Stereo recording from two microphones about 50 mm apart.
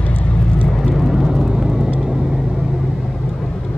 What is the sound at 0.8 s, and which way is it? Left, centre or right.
Vehicle, centre.